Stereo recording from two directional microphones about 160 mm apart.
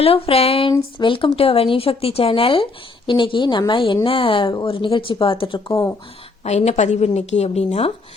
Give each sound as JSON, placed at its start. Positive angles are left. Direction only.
{"t": 0.0, "sound": "speech", "side_deg": 40}